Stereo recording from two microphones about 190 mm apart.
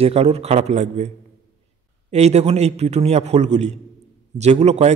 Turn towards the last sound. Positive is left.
turn(degrees=-35)  # may be behind; listen again after turning